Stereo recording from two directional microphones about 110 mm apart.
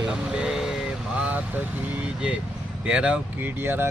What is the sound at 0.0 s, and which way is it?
Vehicle, 5° right (ahead or behind).